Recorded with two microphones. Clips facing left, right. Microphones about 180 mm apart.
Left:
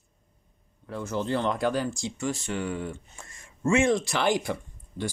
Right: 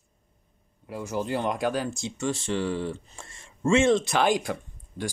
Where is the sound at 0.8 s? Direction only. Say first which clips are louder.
Even; 10° right (ahead or behind).